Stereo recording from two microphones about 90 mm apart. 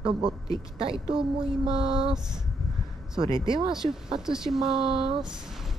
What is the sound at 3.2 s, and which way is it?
Speech, 55° right (ahead or behind).